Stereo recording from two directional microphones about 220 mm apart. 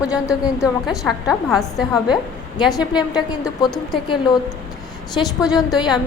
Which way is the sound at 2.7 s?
20° left (ahead or behind).